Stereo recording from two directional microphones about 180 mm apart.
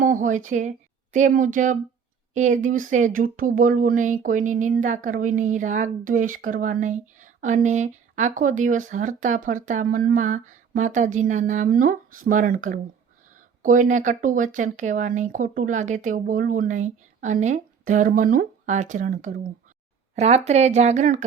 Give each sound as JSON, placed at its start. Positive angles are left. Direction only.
{"t": 0.0, "sound": "speech", "side_deg": -45}